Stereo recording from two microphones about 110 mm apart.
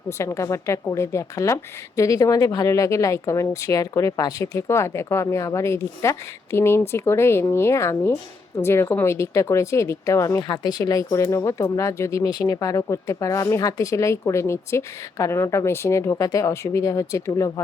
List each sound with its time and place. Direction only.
0.2 s speech: 30° left (ahead or behind)
10.5 s speech: 40° left (ahead or behind)